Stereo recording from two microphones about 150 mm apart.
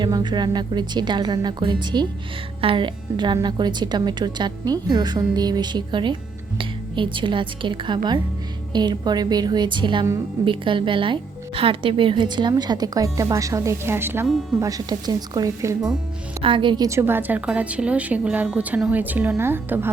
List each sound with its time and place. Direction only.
0.0 s a woman's voice: 30° right (ahead or behind)
16.4 s a woman's voice: 35° right (ahead or behind); by 19.9 s 15° right (ahead or behind)